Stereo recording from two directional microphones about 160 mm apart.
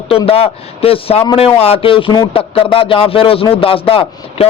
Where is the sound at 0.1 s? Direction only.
35° left (ahead or behind).